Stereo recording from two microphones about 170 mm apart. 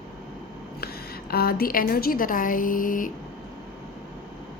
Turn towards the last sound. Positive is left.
turn(degrees=55)  # may be behind; listen again after turning